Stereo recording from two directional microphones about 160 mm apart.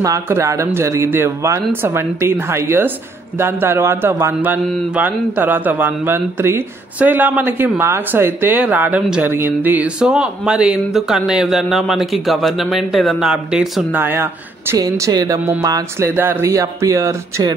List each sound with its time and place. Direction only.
0.0 s a man's voice: 20° right (ahead or behind)